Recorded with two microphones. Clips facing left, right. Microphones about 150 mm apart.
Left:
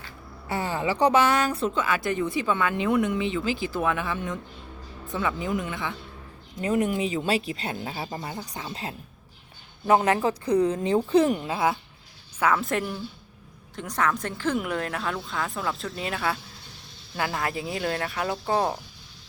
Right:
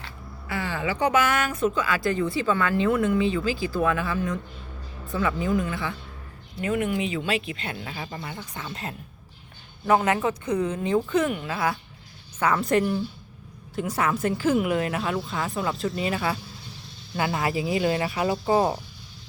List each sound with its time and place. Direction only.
0.4 s speech: 40° left (ahead or behind); by 6.0 s 20° left (ahead or behind)
6.6 s speech: 35° left (ahead or behind)
12.4 s speech: centre (ahead or behind)